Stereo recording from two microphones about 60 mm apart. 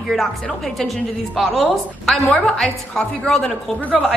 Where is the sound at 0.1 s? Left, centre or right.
Centre.